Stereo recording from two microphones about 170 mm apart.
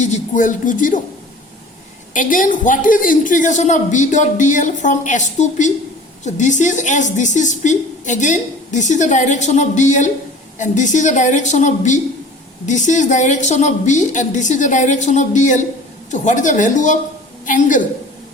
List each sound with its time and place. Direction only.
0.0 s a woman's voice: 50° left (ahead or behind)
2.1 s a woman's voice: 50° left (ahead or behind)